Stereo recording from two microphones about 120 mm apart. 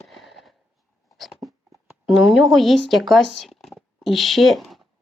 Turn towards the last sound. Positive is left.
turn(degrees=0)  # may be behind; listen again after turning